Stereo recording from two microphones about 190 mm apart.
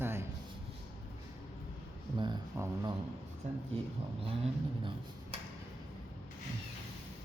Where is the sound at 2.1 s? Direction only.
25° right (ahead or behind).